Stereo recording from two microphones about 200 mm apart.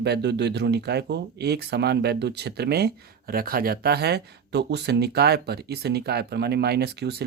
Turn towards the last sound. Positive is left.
turn(degrees=-55)  # may be behind; listen again after turning